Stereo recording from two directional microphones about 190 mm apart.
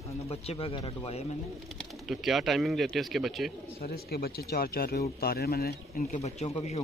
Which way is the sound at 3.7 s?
55° left (ahead or behind).